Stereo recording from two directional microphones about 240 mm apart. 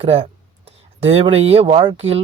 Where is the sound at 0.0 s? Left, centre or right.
Right.